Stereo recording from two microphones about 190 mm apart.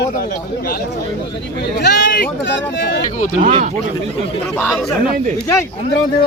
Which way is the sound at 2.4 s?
70° left (ahead or behind).